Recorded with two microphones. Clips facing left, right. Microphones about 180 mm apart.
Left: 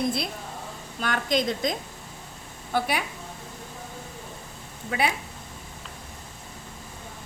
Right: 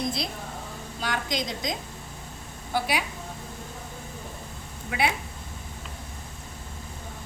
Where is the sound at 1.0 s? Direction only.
55° left (ahead or behind).